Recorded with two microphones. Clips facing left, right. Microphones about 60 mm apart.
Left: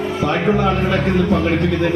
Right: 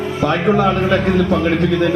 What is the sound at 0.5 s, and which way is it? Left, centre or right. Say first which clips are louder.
Speech: right 2 dB; right.